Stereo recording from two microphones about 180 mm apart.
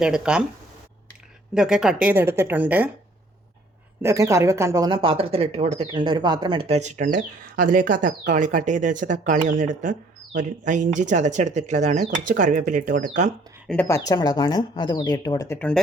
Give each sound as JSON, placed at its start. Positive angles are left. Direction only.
{"t": 0.0, "sound": "speech", "side_deg": -5}
{"t": 1.5, "sound": "speech", "side_deg": -5}
{"t": 4.0, "sound": "speech", "side_deg": -15}
{"t": 5.9, "sound": "speech", "side_deg": -25}
{"t": 13.7, "sound": "speech", "side_deg": 10}
{"t": 15.5, "sound": "speech", "side_deg": 5}